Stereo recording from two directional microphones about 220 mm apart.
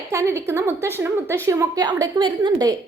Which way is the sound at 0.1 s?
10° right (ahead or behind).